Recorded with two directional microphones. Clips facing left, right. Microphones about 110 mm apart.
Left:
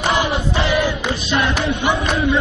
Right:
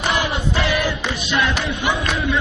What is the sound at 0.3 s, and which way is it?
Choir, 30° left (ahead or behind).